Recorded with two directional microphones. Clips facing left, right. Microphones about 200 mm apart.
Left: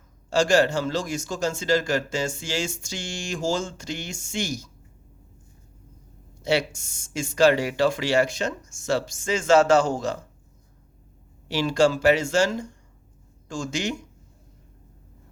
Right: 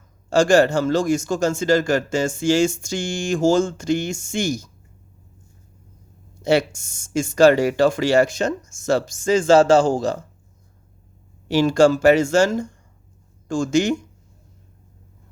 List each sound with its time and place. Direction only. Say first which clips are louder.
0.3 s speech: right 5 dB; 50° right (ahead or behind)
6.4 s speech: right 5 dB; 45° right (ahead or behind)
11.4 s speech: right 6 dB; 45° right (ahead or behind)